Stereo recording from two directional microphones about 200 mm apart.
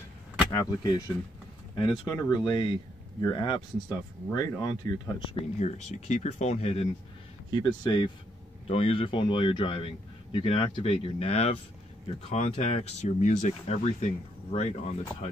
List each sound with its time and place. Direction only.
0.5 s speech: 20° left (ahead or behind)
5.6 s speech: 35° left (ahead or behind)